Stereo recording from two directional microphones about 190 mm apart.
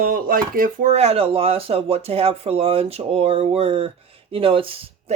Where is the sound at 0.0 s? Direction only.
50° right (ahead or behind).